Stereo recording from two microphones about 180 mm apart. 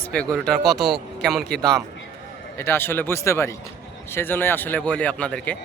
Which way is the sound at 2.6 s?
15° left (ahead or behind).